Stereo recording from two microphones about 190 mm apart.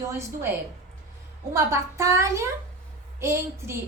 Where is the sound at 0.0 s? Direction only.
15° right (ahead or behind).